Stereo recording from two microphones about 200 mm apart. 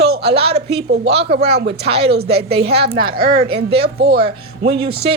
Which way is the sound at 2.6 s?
55° right (ahead or behind).